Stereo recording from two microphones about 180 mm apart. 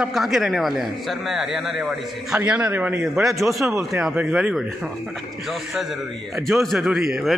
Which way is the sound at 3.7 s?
15° right (ahead or behind).